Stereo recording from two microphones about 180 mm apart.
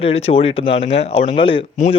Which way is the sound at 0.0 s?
35° left (ahead or behind).